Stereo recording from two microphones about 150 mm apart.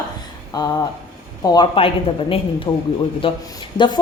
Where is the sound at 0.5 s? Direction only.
25° left (ahead or behind).